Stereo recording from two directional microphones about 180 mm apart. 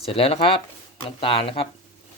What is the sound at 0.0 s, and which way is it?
Speech, 30° left (ahead or behind).